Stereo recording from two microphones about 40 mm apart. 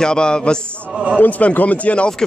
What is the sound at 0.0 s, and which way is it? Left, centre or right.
Speech, left.